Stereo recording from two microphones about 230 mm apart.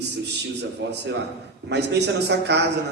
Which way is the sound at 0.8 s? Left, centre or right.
Right.